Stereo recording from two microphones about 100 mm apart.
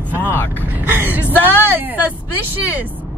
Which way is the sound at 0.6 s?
15° right (ahead or behind).